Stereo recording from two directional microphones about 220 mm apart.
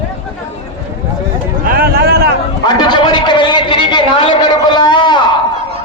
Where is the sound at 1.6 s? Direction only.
40° right (ahead or behind).